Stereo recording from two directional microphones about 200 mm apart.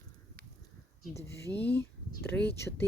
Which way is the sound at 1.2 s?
15° left (ahead or behind).